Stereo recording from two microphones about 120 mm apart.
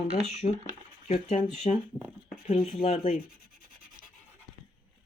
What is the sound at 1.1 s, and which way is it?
Speech, 60° left (ahead or behind).